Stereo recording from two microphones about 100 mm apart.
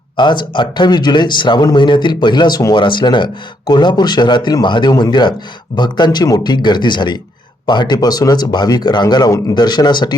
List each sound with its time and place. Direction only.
0.2 s speech: 50° left (ahead or behind)
2.7 s speech: 50° left (ahead or behind)